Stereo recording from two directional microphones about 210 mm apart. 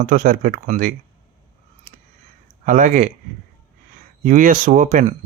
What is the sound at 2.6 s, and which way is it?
Speech, 40° right (ahead or behind).